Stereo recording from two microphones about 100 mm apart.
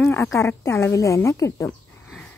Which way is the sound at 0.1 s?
25° left (ahead or behind).